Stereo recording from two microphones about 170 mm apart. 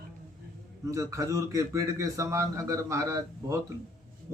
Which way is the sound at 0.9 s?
20° right (ahead or behind).